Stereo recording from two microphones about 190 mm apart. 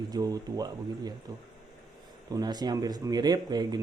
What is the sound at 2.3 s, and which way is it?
Speech, 20° right (ahead or behind).